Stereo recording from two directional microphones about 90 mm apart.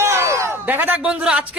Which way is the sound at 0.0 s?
30° right (ahead or behind).